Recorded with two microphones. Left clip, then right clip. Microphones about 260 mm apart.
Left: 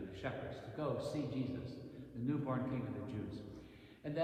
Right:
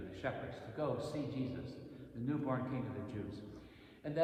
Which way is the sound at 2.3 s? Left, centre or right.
Right.